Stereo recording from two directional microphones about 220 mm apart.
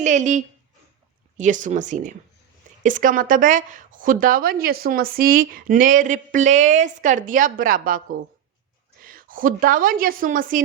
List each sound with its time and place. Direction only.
0.0 s a woman's voice: 35° right (ahead or behind)
9.0 s a woman's voice: 40° right (ahead or behind)